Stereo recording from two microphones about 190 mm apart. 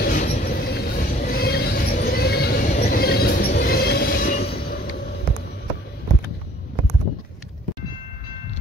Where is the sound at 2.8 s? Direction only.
55° left (ahead or behind).